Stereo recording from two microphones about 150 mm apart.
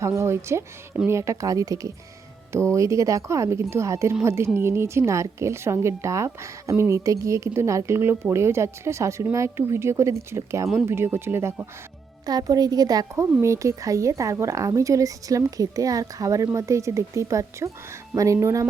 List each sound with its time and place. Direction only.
0.0 s speech: 20° right (ahead or behind)
12.2 s speech: 25° right (ahead or behind)